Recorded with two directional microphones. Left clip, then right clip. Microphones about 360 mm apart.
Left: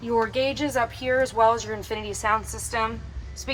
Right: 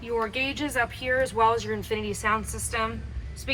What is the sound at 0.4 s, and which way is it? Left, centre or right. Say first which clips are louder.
A woman's voice: left 3 dB; centre.